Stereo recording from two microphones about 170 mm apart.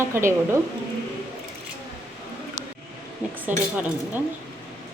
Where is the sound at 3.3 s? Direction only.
10° right (ahead or behind).